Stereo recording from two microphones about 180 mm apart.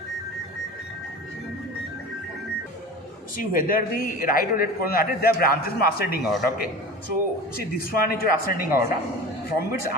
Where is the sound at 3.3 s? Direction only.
50° left (ahead or behind).